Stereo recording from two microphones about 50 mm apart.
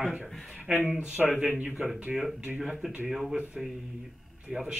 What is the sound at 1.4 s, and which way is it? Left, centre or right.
Speech, right.